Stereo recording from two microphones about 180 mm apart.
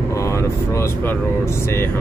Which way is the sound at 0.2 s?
15° left (ahead or behind).